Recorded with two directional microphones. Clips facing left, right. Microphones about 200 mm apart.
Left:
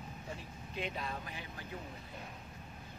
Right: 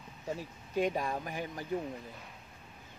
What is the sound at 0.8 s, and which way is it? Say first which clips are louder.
Speech: right 9 dB; 45° right (ahead or behind).